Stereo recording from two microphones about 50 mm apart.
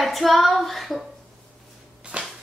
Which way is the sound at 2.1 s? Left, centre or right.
Right.